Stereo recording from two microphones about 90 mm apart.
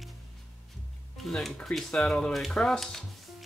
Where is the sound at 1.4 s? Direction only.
5° left (ahead or behind).